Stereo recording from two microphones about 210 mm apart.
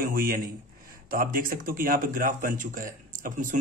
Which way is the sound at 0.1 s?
45° right (ahead or behind).